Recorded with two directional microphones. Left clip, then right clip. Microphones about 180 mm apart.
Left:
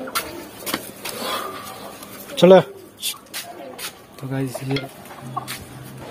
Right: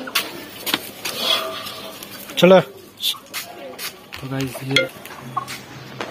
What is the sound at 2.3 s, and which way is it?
Speech, 15° left (ahead or behind).